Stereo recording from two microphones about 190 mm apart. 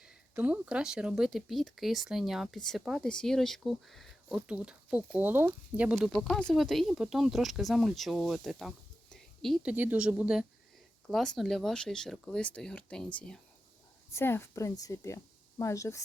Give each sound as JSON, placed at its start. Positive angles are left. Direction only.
{"t": 0.0, "sound": "speech", "side_deg": -5}
{"t": 6.1, "sound": "a woman's voice", "side_deg": 5}